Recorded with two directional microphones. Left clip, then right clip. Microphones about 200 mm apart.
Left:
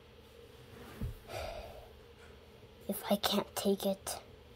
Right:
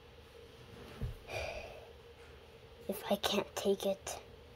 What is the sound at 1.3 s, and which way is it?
Gasp, 5° right (ahead or behind).